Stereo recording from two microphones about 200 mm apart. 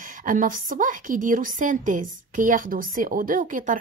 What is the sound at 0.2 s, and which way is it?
A woman's voice, 40° right (ahead or behind).